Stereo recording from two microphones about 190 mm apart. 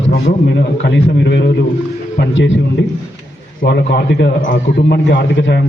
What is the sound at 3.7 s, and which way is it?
A man's voice, 65° left (ahead or behind).